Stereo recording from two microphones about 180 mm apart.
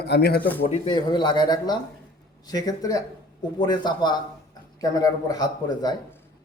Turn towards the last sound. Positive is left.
turn(degrees=20)  # may be behind; listen again after turning